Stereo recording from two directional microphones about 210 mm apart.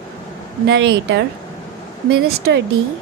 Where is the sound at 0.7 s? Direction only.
55° right (ahead or behind).